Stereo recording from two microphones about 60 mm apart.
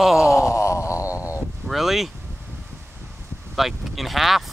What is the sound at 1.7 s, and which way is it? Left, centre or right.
Speech, centre.